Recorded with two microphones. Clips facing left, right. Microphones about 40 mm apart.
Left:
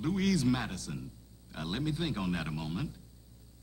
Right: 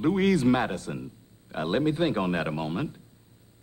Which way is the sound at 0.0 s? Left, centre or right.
Right.